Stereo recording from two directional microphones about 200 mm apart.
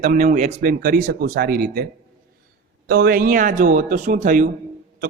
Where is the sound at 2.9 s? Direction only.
45° right (ahead or behind).